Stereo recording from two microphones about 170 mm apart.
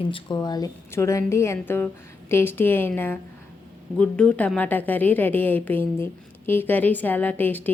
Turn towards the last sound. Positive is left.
turn(degrees=10)  # may be behind; listen again after turning